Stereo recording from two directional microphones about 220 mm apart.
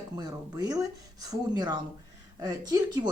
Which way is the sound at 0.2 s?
15° right (ahead or behind).